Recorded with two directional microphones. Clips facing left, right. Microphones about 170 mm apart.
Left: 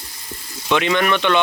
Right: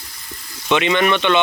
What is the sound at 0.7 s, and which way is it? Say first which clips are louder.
Speech: right 1 dB; 15° right (ahead or behind).